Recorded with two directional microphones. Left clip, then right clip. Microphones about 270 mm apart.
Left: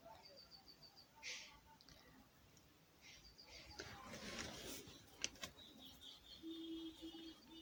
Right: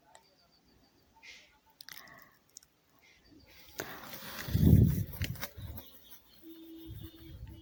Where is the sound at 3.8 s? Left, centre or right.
Right.